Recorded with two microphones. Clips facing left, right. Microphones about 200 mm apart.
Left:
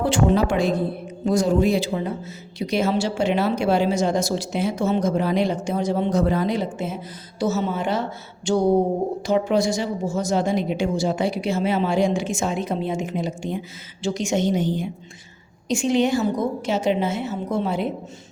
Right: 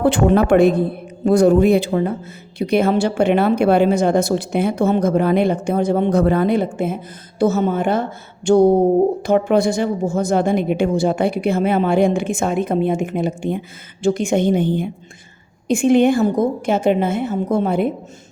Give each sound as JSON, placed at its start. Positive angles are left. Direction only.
{"t": 0.0, "sound": "a woman's voice", "side_deg": -60}